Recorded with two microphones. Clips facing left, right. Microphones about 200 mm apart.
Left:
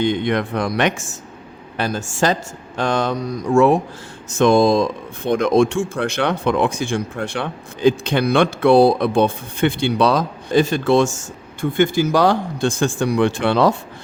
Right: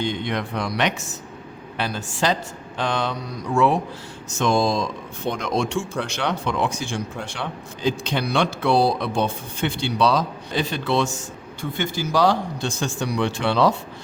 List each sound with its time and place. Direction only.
0.0 s speech: 55° left (ahead or behind)